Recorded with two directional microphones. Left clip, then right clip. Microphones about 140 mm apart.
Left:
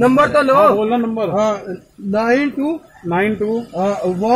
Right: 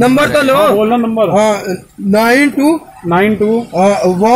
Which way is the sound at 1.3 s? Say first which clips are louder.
Right 6 dB; 10° right (ahead or behind).